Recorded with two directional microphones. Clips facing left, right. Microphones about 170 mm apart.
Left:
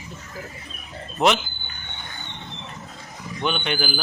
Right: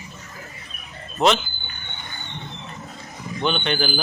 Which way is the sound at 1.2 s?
15° left (ahead or behind).